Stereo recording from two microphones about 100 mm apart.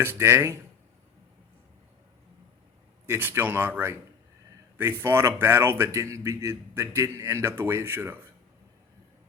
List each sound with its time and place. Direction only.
0.0 s speech: 25° right (ahead or behind)
3.1 s speech: 20° right (ahead or behind)